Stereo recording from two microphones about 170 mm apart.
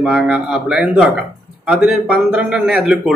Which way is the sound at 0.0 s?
5° right (ahead or behind).